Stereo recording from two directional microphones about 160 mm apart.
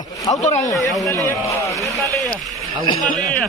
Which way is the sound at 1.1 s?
20° left (ahead or behind).